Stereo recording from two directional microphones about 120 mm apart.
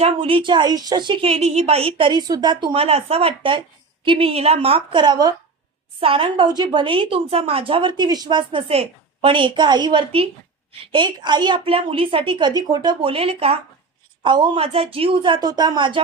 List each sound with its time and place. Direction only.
0.0 s a woman's voice: 50° right (ahead or behind)
6.0 s a woman's voice: 50° right (ahead or behind)
8.6 s a woman's voice: 55° right (ahead or behind)
14.3 s a woman's voice: 40° right (ahead or behind)